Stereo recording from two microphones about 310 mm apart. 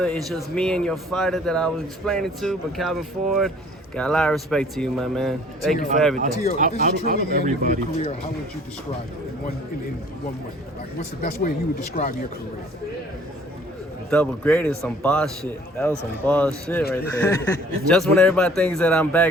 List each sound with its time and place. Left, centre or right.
0.0 s speech: centre
6.6 s speech: right
11.2 s speech: left
14.1 s speech: centre